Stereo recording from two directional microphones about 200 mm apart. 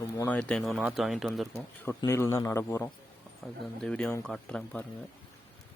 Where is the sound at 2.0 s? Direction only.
15° left (ahead or behind).